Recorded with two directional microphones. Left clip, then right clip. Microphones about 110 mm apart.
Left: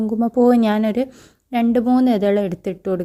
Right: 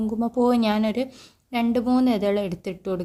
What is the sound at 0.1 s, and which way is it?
A woman's voice, 40° left (ahead or behind).